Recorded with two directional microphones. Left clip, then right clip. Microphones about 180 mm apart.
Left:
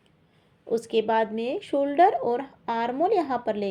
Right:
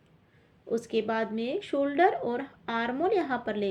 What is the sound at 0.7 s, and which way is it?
A woman's voice, 30° left (ahead or behind).